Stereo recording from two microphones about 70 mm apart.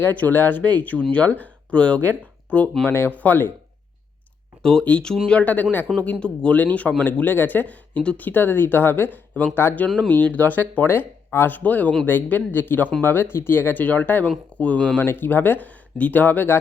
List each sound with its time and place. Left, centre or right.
0.1 s speech: left
4.6 s speech: centre
9.6 s speech: left
10.2 s speech: left
15.0 s speech: left